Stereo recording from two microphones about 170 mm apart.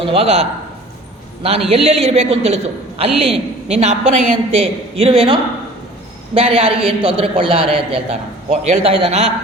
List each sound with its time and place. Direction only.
0.0 s a woman's voice: 35° right (ahead or behind)